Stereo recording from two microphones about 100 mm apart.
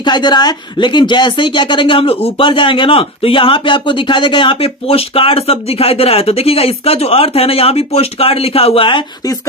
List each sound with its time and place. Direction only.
0.0 s speech: 50° left (ahead or behind)